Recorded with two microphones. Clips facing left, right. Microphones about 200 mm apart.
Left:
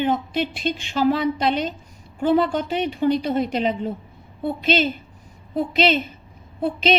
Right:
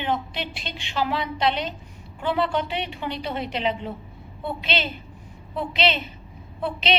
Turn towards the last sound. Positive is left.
turn(degrees=45)  # may be behind; listen again after turning